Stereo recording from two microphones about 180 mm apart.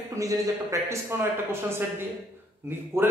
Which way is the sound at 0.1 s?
15° right (ahead or behind).